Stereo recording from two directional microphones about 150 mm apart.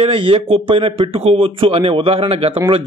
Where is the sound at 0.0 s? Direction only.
35° right (ahead or behind).